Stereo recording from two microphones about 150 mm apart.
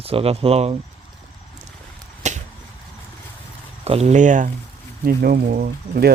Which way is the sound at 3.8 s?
45° right (ahead or behind).